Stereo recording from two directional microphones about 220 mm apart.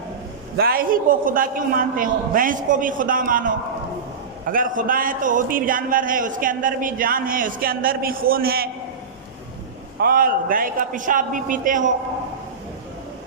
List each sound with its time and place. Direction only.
0.5 s a man's voice: 45° right (ahead or behind)
10.0 s a man's voice: 40° right (ahead or behind)